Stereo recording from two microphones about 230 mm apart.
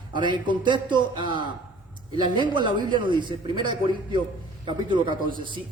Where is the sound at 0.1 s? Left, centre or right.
Centre.